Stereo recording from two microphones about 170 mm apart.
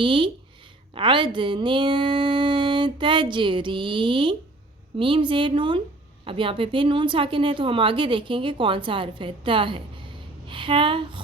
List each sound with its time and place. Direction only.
0.0 s a woman's voice: 30° right (ahead or behind)